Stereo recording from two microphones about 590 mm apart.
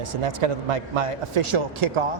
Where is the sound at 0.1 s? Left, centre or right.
Right.